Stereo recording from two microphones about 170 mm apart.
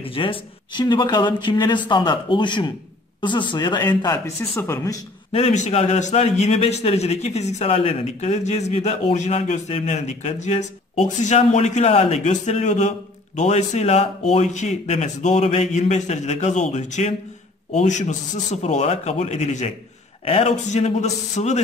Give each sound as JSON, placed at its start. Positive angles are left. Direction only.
{"t": 0.0, "sound": "speech", "side_deg": 30}
{"t": 5.3, "sound": "a man's voice", "side_deg": 40}